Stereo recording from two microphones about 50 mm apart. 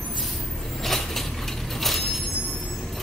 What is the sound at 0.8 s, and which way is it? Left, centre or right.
Vehicle, centre.